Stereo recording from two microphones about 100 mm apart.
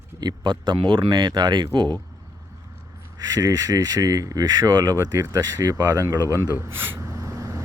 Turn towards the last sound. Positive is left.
turn(degrees=-30)  # may be behind; listen again after turning